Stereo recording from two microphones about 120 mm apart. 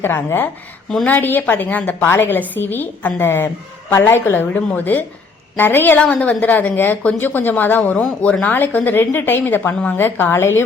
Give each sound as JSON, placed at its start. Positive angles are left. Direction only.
{"t": 0.0, "sound": "a woman's voice", "side_deg": 20}